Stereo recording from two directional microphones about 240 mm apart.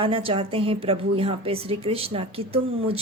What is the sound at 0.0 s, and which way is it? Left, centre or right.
A woman's voice, right.